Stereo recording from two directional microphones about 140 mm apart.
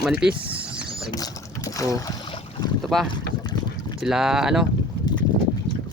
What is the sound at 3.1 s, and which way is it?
Boat, 30° left (ahead or behind).